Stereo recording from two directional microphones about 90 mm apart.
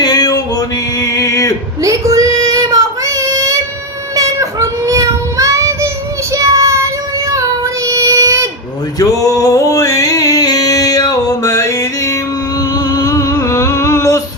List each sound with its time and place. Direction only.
0.0 s male singing: 50° left (ahead or behind)
1.8 s child singing: 35° right (ahead or behind)
9.0 s music: 40° left (ahead or behind)
12.7 s a sound: 45° left (ahead or behind)